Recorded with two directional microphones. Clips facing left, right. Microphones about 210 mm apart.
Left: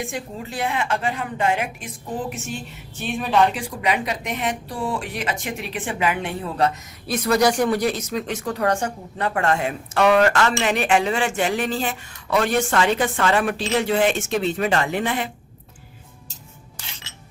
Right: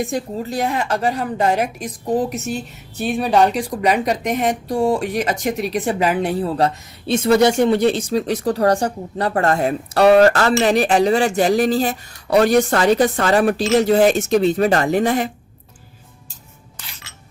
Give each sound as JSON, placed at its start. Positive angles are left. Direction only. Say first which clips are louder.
{"t": 0.0, "sound": "speech", "louder": "right 7 dB", "side_deg": -40}